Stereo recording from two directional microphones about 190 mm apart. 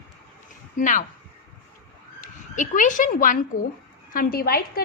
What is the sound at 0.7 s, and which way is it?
Speech, 40° left (ahead or behind).